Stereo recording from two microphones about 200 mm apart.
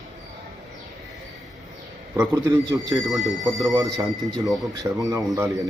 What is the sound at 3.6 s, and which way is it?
Speech, 15° right (ahead or behind).